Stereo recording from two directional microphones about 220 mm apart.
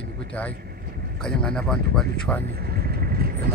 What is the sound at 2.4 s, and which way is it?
Vehicle, 45° right (ahead or behind).